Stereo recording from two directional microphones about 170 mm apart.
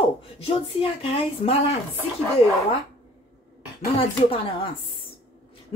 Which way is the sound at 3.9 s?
35° left (ahead or behind).